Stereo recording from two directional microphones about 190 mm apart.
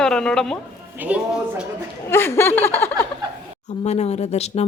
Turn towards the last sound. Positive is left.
turn(degrees=35)  # may be behind; listen again after turning